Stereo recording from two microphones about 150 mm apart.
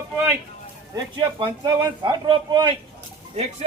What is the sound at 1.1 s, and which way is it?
A man's voice, 30° right (ahead or behind).